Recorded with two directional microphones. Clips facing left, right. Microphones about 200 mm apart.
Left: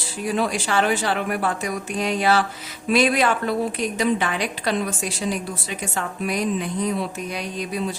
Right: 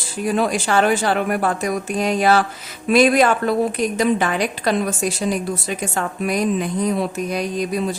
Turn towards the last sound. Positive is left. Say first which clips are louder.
# right 5 dB
turn(degrees=-45)  # may be behind; listen again after turning